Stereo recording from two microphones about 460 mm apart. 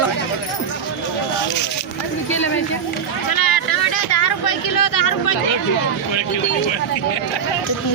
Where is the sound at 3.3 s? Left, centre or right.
Left.